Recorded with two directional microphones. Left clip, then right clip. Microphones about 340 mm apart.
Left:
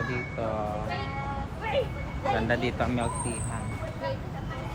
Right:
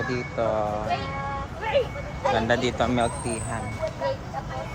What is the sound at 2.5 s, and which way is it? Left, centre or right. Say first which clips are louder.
Speech: right 5 dB; centre.